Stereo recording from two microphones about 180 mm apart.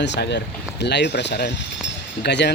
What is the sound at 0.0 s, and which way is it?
Speech, 75° left (ahead or behind).